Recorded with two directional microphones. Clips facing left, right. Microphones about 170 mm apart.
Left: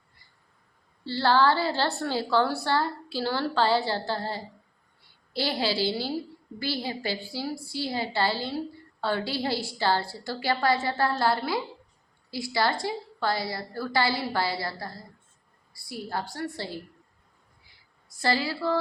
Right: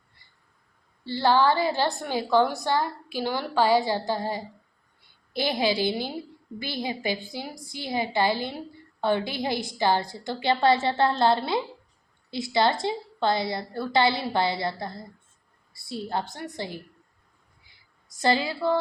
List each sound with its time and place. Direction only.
1.0 s a woman's voice: 15° right (ahead or behind)
18.2 s a woman's voice: 20° right (ahead or behind)